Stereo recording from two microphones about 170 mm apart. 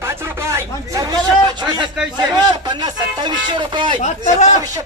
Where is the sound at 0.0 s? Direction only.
15° right (ahead or behind).